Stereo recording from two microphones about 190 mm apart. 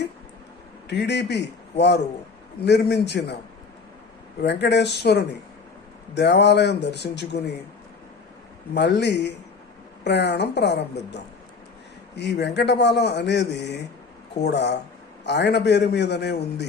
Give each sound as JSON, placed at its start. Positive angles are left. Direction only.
{"t": 0.9, "sound": "a man's voice", "side_deg": 65}
{"t": 4.4, "sound": "a man's voice", "side_deg": 65}
{"t": 8.7, "sound": "a man's voice", "side_deg": 65}